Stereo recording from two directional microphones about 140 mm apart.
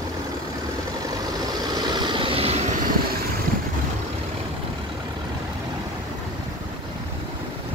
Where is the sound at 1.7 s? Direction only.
30° right (ahead or behind).